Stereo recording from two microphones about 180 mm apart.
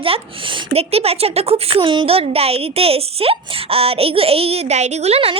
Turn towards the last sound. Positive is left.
turn(degrees=-35)  # may be behind; listen again after turning